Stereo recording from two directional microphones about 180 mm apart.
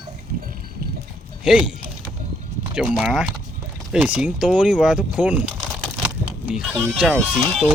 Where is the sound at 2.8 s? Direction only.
5° right (ahead or behind).